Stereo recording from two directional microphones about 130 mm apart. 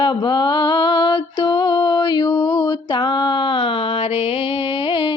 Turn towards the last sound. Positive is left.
turn(degrees=40)  # may be behind; listen again after turning